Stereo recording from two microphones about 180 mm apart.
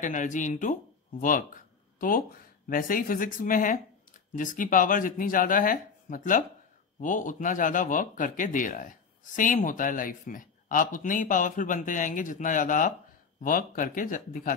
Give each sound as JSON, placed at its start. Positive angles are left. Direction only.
{"t": 0.0, "sound": "speech", "side_deg": 45}